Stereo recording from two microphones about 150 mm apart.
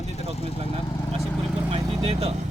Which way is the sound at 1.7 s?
40° right (ahead or behind).